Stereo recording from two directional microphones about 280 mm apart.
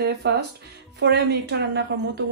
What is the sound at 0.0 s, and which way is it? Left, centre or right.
Speech, right.